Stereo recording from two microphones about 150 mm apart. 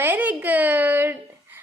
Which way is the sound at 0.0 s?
10° right (ahead or behind).